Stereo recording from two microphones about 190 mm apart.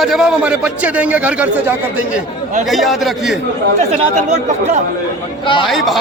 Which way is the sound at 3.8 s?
40° right (ahead or behind).